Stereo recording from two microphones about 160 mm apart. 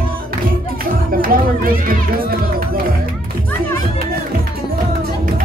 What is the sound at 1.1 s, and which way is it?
Children playing, 60° right (ahead or behind).